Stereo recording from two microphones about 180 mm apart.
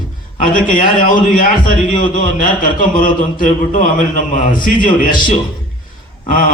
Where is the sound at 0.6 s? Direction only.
50° left (ahead or behind).